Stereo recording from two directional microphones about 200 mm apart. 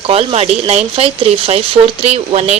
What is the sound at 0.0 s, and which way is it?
Speech, 30° right (ahead or behind).